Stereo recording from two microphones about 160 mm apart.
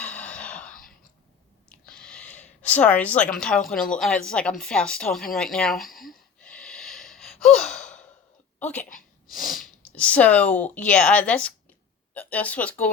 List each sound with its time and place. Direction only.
0.0 s gasp: 10° left (ahead or behind)
0.7 s whispering: 60° left (ahead or behind)
1.9 s a sound: 5° left (ahead or behind)
2.4 s a woman's voice: 10° left (ahead or behind)
8.5 s a sound: 10° left (ahead or behind)
9.3 s speech: centre (ahead or behind)